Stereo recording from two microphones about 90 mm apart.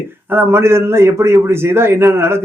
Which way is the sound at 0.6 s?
30° right (ahead or behind).